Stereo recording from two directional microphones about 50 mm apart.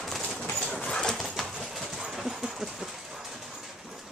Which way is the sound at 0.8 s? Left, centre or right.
Centre.